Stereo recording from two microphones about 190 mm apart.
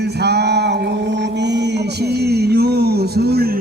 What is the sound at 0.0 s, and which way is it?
Mantra, 60° right (ahead or behind).